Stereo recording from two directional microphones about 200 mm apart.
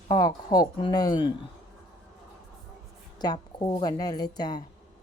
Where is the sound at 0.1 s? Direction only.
20° left (ahead or behind).